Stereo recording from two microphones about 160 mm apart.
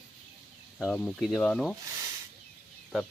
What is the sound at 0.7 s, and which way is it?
Speech, 5° left (ahead or behind).